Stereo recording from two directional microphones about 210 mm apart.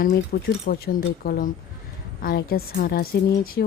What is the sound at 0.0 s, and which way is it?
A woman's voice, 40° left (ahead or behind).